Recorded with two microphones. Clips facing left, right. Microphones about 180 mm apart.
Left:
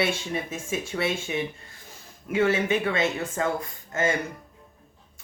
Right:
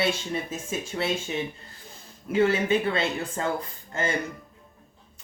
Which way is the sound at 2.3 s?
30° right (ahead or behind).